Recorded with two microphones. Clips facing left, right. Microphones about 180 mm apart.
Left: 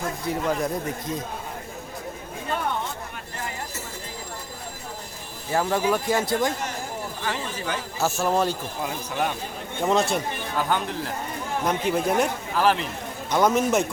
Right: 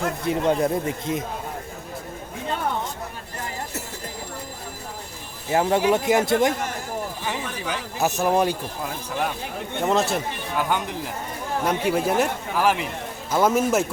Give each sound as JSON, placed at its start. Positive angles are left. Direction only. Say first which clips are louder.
{"t": 0.3, "sound": "speech", "louder": "right 4 dB", "side_deg": -25}
{"t": 5.5, "sound": "speech", "louder": "right 3 dB", "side_deg": -25}
{"t": 8.8, "sound": "speech", "louder": "left 2 dB", "side_deg": 0}
{"t": 10.7, "sound": "speech", "louder": "even", "side_deg": -15}